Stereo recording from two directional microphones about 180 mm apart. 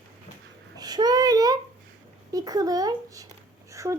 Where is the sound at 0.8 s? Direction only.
20° right (ahead or behind).